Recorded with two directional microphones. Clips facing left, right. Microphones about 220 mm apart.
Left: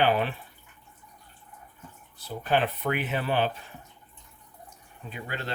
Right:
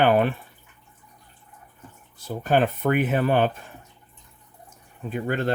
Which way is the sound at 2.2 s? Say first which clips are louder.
Right 5 dB; 45° right (ahead or behind).